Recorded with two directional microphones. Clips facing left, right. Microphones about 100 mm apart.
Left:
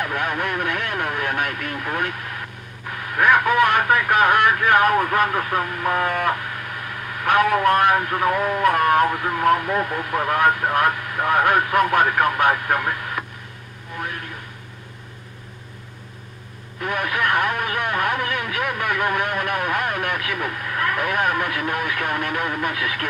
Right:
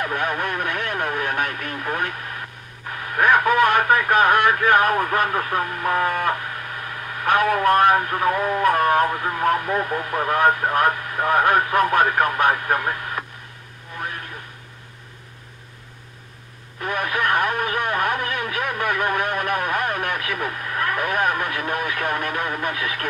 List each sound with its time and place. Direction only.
0.0 s vehicle: 35° right (ahead or behind)
3.2 s speech: 35° right (ahead or behind)
7.4 s speech: 35° right (ahead or behind)
16.8 s speech: 35° right (ahead or behind)